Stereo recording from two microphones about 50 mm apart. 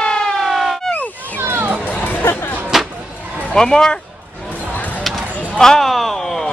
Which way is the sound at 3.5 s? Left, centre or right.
Centre.